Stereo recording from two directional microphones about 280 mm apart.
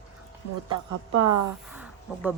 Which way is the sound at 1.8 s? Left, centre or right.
Centre.